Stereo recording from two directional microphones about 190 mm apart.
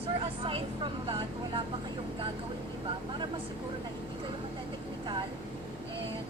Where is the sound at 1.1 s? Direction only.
25° right (ahead or behind).